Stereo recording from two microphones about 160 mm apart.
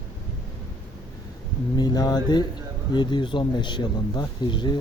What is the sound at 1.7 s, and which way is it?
Speech, 25° left (ahead or behind).